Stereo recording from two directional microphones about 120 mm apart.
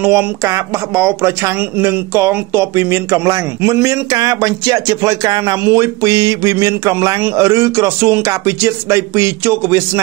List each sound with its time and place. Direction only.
0.0 s speech: 20° right (ahead or behind)